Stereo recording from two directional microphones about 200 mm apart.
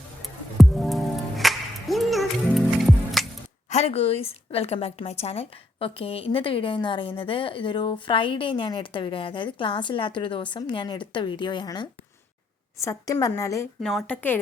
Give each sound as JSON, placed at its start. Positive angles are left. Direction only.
{"t": 0.2, "sound": "music", "side_deg": 0}
{"t": 3.2, "sound": "a sound", "side_deg": 0}
{"t": 3.7, "sound": "a woman's voice", "side_deg": 30}